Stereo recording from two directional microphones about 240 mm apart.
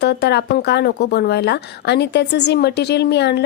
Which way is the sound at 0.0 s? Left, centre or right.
Left.